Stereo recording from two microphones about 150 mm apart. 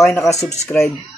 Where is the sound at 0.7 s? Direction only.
Centre (ahead or behind).